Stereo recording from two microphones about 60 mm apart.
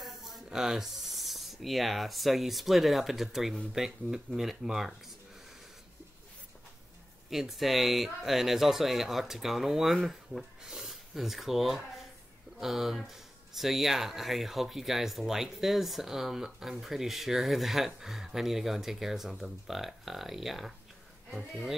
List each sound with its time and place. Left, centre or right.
0.0 s speech: centre
7.2 s speech: centre